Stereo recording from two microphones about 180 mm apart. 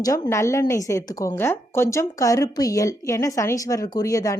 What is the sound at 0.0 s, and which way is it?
A woman's voice, 15° left (ahead or behind).